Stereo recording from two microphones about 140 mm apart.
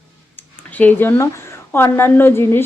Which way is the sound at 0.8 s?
15° left (ahead or behind).